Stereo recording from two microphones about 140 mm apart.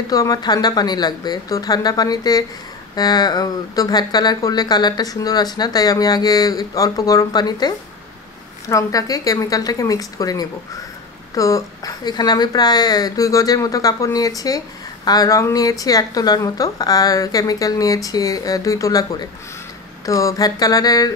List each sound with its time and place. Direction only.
0.1 s speech: 25° left (ahead or behind)